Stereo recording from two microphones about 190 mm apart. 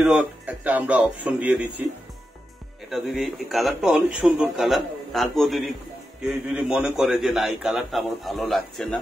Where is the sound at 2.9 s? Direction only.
Centre (ahead or behind).